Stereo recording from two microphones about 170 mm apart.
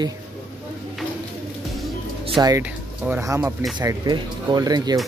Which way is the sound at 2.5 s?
15° right (ahead or behind).